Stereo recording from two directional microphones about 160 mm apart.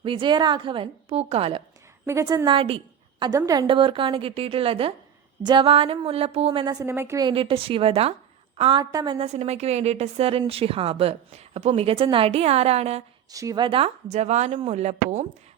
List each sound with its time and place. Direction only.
0.0 s a woman's voice: 30° right (ahead or behind)
2.0 s a woman's voice: 20° right (ahead or behind)
3.2 s a woman's voice: 20° right (ahead or behind)
6.8 s a woman's voice: 15° right (ahead or behind)
7.3 s a woman's voice: 35° right (ahead or behind)
9.1 s a woman's voice: 40° right (ahead or behind)
13.3 s a woman's voice: 20° right (ahead or behind)
13.7 s speech: 35° right (ahead or behind)